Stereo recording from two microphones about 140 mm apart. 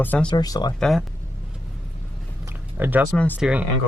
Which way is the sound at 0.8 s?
Centre (ahead or behind).